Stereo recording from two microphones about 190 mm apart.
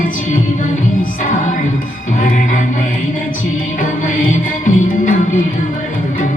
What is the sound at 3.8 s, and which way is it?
Music, 45° left (ahead or behind).